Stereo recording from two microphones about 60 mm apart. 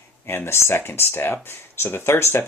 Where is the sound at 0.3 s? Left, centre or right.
Left.